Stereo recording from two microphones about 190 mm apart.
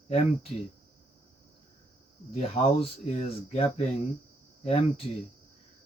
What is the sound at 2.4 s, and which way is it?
Speech, 30° left (ahead or behind).